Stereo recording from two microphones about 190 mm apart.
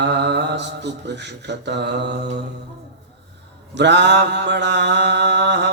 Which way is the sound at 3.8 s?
65° right (ahead or behind).